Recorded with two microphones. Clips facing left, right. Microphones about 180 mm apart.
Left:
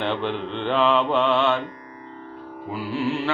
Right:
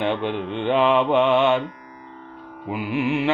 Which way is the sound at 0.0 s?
10° right (ahead or behind).